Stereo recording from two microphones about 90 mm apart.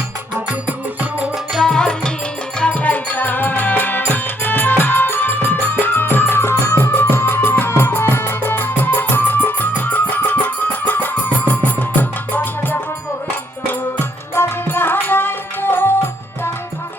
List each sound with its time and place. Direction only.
1.5 s music: 5° left (ahead or behind)
14.3 s music: 25° left (ahead or behind)